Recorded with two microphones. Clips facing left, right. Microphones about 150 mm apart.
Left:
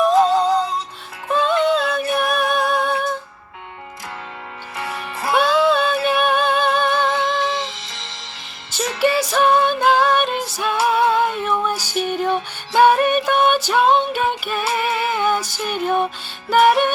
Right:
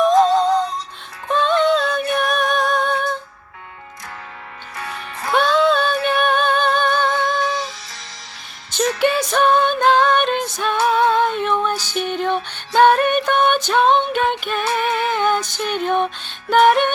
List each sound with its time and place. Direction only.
0.0 s music: 5° left (ahead or behind)
5.3 s music: 5° left (ahead or behind)
7.2 s music: 25° left (ahead or behind)
9.0 s music: 5° left (ahead or behind)